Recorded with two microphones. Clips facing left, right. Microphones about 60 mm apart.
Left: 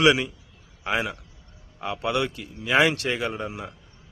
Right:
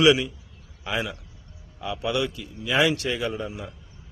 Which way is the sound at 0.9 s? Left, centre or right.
Left.